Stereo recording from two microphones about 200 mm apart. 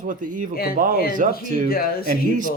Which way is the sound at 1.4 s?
40° right (ahead or behind).